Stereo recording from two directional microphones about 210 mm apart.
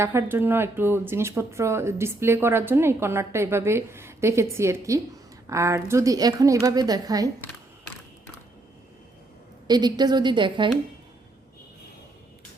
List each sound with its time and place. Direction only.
0.0 s speech: 10° right (ahead or behind)
9.6 s a woman's voice: 20° right (ahead or behind)